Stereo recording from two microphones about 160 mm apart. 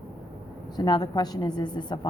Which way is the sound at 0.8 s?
25° left (ahead or behind).